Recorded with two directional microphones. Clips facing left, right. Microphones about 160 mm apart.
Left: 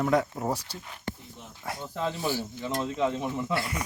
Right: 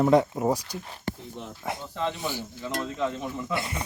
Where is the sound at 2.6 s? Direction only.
20° left (ahead or behind).